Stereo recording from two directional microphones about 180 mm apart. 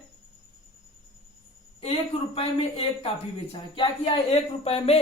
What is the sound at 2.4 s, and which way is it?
A man's voice, 30° left (ahead or behind).